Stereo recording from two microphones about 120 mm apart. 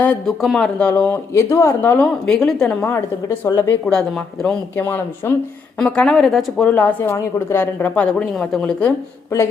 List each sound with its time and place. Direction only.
0.3 s speech: 5° left (ahead or behind)
5.8 s a woman's voice: 5° left (ahead or behind)
6.6 s speech: 15° left (ahead or behind)